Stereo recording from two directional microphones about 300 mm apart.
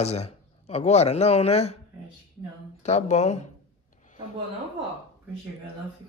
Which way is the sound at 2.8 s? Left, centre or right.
Left.